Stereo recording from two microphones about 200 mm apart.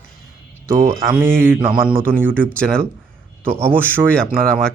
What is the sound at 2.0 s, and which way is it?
Speech, 10° right (ahead or behind).